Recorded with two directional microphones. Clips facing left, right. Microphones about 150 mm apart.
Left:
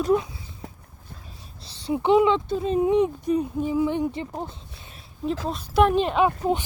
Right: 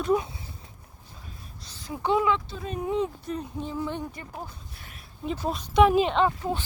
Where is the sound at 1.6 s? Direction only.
30° left (ahead or behind).